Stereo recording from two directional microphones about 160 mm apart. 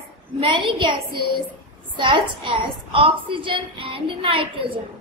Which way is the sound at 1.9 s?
30° right (ahead or behind).